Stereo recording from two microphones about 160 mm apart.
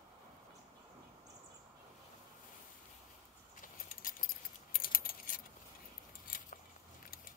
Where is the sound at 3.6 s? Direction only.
60° left (ahead or behind).